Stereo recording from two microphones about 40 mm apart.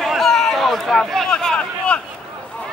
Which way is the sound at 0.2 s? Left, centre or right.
Centre.